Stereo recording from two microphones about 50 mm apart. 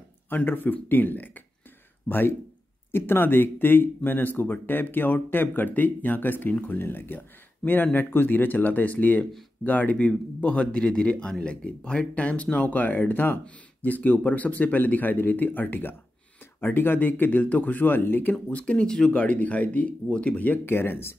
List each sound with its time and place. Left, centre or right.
0.5 s speech: left
18.5 s speech: left
20.6 s speech: left